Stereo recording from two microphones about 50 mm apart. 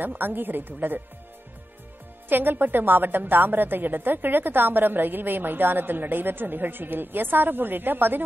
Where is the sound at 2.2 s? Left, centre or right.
Right.